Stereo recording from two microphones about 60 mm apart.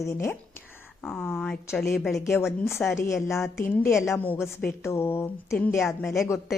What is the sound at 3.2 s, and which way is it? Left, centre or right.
A woman's voice, left.